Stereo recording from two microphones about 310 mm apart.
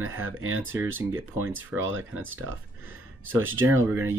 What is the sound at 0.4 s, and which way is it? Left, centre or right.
Speech, right.